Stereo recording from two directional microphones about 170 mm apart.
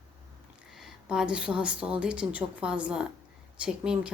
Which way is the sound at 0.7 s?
5° right (ahead or behind).